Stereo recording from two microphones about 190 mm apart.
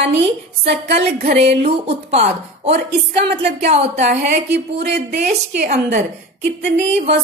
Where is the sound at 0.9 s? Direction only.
55° right (ahead or behind).